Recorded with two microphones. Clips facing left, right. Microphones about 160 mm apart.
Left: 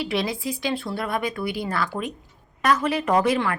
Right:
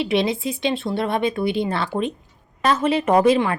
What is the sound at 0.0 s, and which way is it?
A woman's voice, 25° right (ahead or behind).